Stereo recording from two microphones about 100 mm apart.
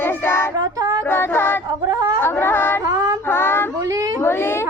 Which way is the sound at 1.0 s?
25° left (ahead or behind).